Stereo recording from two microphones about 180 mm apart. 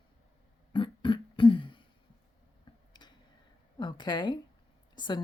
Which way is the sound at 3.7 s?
25° left (ahead or behind).